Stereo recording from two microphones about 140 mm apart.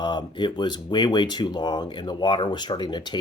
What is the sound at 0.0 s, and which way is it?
Speech, 30° left (ahead or behind).